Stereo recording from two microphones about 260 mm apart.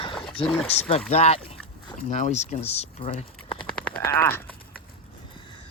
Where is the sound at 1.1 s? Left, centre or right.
Left.